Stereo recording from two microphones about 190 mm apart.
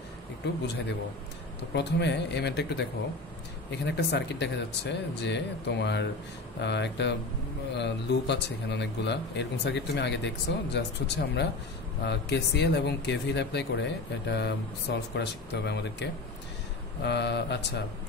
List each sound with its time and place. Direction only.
1.7 s speech: 65° left (ahead or behind)